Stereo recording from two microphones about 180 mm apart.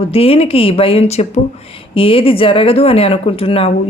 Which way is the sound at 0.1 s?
35° left (ahead or behind).